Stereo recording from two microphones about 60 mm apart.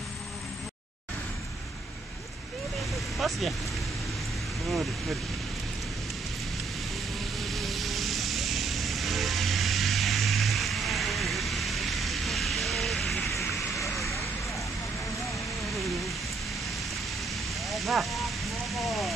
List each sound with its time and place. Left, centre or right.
3.2 s speech: centre
7.3 s vehicle: centre
17.6 s a sound: centre